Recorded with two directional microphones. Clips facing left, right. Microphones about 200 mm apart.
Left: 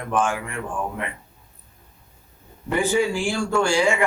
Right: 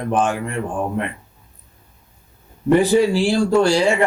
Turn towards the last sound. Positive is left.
turn(degrees=-35)  # may be behind; listen again after turning